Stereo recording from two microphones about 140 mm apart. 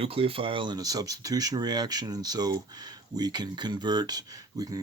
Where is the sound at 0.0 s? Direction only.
40° right (ahead or behind).